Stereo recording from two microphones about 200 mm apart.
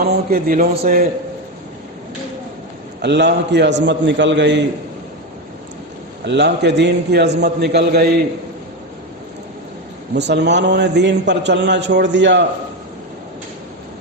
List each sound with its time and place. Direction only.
0.0 s speech: 45° right (ahead or behind)
3.0 s a man's voice: 60° right (ahead or behind)
6.2 s a man's voice: 60° right (ahead or behind)
10.2 s a man's voice: 60° right (ahead or behind)